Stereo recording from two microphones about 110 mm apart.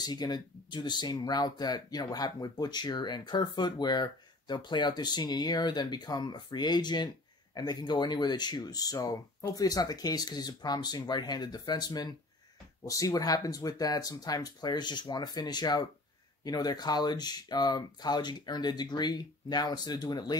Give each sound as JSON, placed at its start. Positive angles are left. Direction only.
{"t": 0.0, "sound": "speech", "side_deg": 40}